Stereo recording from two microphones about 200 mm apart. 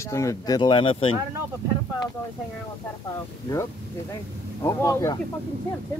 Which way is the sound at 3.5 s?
15° left (ahead or behind).